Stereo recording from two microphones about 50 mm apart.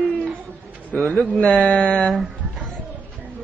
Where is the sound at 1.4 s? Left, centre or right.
Centre.